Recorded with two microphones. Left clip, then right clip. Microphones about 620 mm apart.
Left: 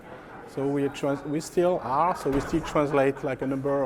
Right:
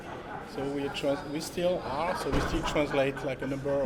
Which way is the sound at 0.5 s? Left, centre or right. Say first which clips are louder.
Left 6 dB; left.